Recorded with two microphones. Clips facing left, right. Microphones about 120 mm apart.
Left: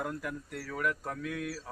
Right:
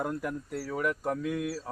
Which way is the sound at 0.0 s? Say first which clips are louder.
Right 4 dB; 25° right (ahead or behind).